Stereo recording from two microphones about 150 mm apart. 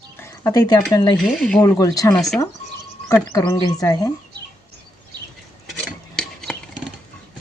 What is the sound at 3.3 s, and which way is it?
Speech, 25° left (ahead or behind).